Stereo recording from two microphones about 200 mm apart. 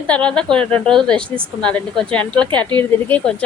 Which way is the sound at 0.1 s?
5° left (ahead or behind).